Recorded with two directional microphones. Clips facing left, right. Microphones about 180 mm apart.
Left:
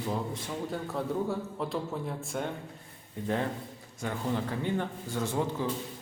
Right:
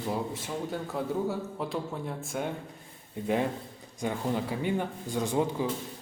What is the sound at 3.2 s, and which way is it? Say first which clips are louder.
A man's voice: right 3 dB; 15° right (ahead or behind).